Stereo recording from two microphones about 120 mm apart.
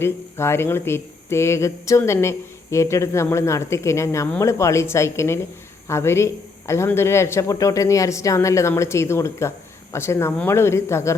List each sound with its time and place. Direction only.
0.0 s speech: 20° left (ahead or behind)